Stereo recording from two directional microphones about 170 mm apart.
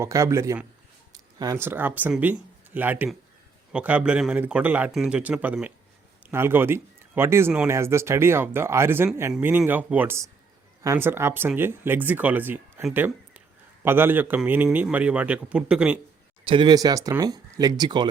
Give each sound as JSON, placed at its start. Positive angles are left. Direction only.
{"t": 0.0, "sound": "speech", "side_deg": -15}
{"t": 16.4, "sound": "speech", "side_deg": -30}